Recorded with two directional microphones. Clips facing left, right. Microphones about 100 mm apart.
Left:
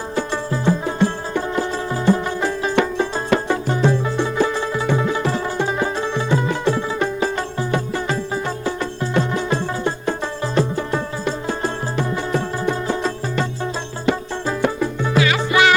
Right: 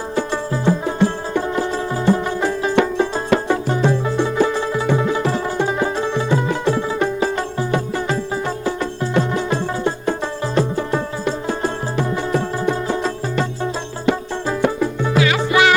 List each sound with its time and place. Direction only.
0.6 s music: 20° right (ahead or behind)